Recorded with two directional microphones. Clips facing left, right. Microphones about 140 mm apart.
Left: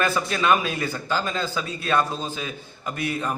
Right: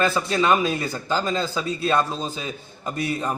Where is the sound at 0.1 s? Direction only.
25° right (ahead or behind).